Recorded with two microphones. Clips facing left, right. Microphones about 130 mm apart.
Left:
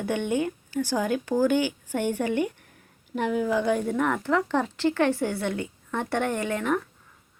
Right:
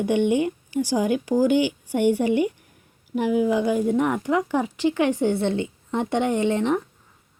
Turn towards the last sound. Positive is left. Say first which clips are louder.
# right 5 dB
turn(degrees=-25)  # may be behind; listen again after turning